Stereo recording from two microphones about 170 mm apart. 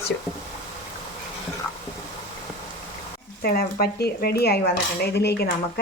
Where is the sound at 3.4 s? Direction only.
65° left (ahead or behind).